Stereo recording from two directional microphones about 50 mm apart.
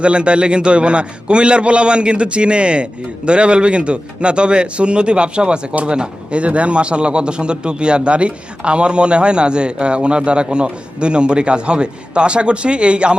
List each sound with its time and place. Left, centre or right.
0.0 s a man's voice: right